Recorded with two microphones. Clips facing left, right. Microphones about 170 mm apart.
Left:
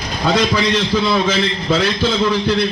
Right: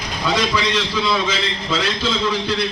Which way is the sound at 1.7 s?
55° left (ahead or behind).